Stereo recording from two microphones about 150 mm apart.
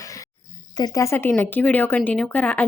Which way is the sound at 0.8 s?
20° left (ahead or behind).